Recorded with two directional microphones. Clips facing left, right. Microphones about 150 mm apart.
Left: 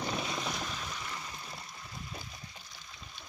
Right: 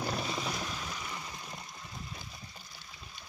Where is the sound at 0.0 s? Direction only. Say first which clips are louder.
Right 1 dB; centre (ahead or behind).